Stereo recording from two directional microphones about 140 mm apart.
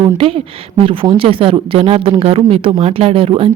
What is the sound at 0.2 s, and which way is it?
A woman's voice, 40° right (ahead or behind).